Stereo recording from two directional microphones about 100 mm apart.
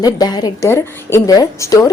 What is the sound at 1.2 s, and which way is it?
Speech, 35° left (ahead or behind).